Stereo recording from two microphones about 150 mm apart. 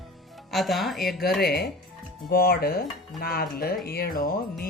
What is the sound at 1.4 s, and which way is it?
Speech, 90° left.